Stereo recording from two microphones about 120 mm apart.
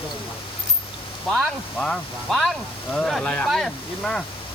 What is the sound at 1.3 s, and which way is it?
Speech, 5° left (ahead or behind).